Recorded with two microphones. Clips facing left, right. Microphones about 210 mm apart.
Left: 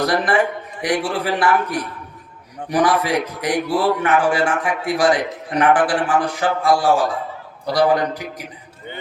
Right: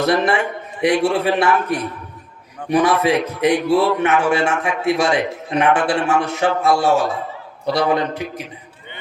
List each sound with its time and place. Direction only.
0.0 s a man's voice: 25° right (ahead or behind)